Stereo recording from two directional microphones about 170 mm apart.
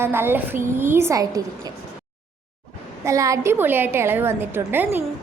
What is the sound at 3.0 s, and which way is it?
A woman's voice, 20° right (ahead or behind).